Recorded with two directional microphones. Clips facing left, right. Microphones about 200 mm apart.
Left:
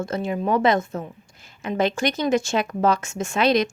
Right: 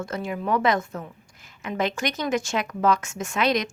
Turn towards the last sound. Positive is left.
turn(degrees=30)  # may be behind; listen again after turning